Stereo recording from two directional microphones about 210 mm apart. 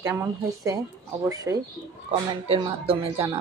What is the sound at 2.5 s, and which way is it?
Speech, 25° right (ahead or behind).